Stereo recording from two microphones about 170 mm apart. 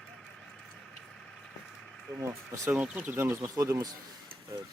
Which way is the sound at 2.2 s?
15° right (ahead or behind).